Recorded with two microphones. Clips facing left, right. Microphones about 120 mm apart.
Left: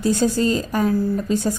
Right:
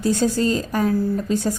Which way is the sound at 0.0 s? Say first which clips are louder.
Left 1 dB; 15° left (ahead or behind).